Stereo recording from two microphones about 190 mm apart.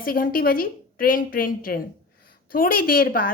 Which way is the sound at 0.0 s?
50° left (ahead or behind).